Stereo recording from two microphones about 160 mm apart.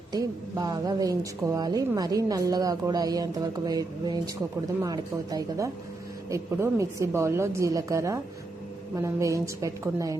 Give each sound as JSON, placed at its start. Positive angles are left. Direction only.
{"t": 0.1, "sound": "a woman's voice", "side_deg": -25}